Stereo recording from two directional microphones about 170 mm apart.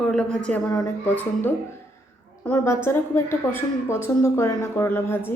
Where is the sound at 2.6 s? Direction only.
15° left (ahead or behind).